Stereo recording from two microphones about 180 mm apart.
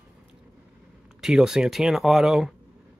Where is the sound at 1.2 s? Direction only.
5° right (ahead or behind).